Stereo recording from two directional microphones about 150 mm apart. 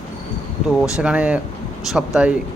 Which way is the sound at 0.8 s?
5° right (ahead or behind).